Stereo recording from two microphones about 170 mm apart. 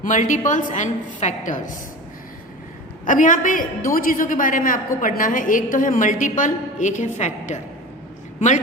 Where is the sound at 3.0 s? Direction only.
50° left (ahead or behind).